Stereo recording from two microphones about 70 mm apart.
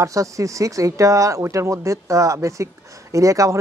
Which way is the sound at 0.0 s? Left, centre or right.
Right.